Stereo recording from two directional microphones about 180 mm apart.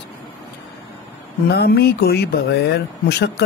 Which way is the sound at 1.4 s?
60° left (ahead or behind).